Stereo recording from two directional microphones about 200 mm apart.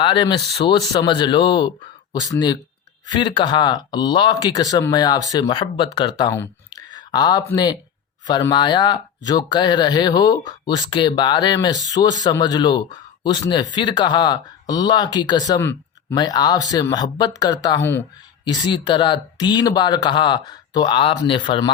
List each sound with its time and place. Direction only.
0.0 s speech: 25° left (ahead or behind)